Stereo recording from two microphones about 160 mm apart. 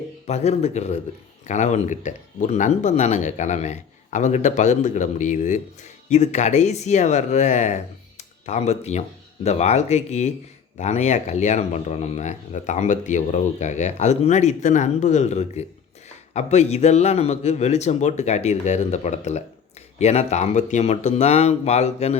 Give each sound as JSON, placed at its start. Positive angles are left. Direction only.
{"t": 0.3, "sound": "speech", "side_deg": 45}